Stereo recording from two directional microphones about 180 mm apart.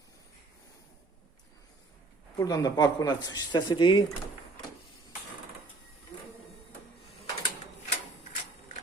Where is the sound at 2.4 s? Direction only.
20° left (ahead or behind).